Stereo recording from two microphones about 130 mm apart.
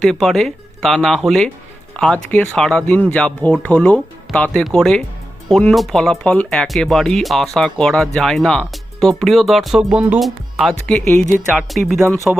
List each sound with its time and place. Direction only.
0.0 s speech: centre (ahead or behind)
11.9 s speech: 20° right (ahead or behind)